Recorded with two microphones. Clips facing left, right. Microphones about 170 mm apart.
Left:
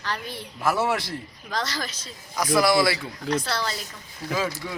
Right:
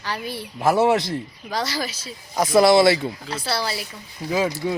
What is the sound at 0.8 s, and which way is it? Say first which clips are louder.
Speech: right 7 dB; 20° right (ahead or behind).